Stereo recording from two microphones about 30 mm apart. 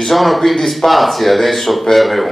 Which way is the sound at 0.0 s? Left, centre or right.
Centre.